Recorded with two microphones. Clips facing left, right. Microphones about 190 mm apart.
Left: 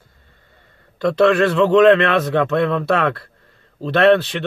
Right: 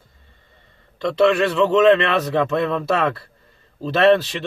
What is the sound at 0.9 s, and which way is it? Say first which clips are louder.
A man's voice: left 2 dB; centre (ahead or behind).